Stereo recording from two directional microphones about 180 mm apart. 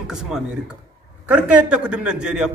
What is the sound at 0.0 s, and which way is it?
A man's voice, 5° right (ahead or behind).